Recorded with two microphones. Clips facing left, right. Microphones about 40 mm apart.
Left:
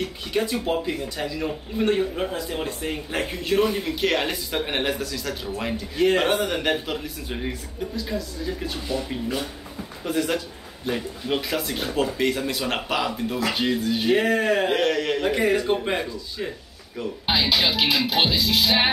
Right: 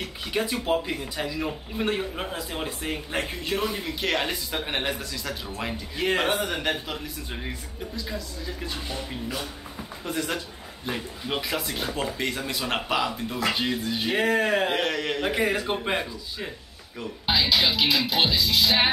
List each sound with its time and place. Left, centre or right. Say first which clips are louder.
0.0 s speech: left 3 dB; centre
17.3 s music: left 1 dB; centre